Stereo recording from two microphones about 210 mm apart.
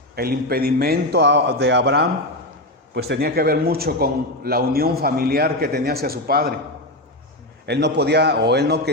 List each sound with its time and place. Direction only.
0.2 s a man's voice: 45° right (ahead or behind)
7.7 s a man's voice: 55° right (ahead or behind)